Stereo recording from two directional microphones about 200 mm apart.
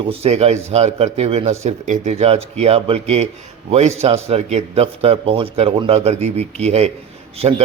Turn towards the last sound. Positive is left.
turn(degrees=-30)  # may be behind; listen again after turning